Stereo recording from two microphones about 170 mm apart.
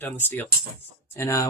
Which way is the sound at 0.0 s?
10° left (ahead or behind).